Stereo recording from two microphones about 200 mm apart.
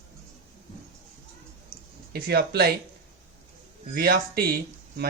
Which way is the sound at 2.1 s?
50° right (ahead or behind).